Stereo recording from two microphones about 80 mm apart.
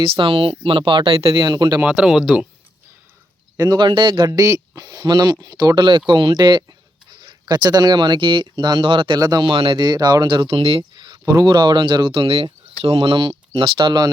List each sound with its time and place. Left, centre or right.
0.0 s speech: right
1.8 s speech: centre
3.6 s speech: right
4.3 s speech: right
9.1 s speech: right
9.4 s speech: right
11.3 s speech: right